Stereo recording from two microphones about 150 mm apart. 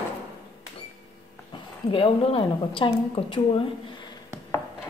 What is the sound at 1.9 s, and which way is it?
Speech, 35° left (ahead or behind).